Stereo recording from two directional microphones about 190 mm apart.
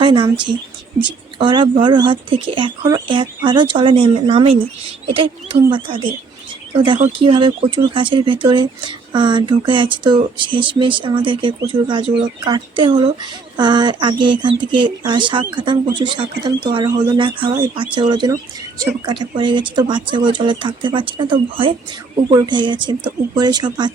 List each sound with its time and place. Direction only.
0.0 s speech: 25° right (ahead or behind)